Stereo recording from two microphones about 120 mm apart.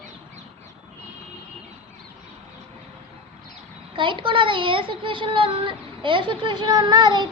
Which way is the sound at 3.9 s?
45° right (ahead or behind).